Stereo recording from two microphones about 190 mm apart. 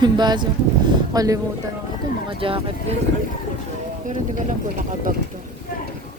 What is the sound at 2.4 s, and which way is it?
Speech, 30° right (ahead or behind).